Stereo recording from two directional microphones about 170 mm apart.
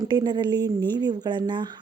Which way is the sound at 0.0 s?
25° right (ahead or behind).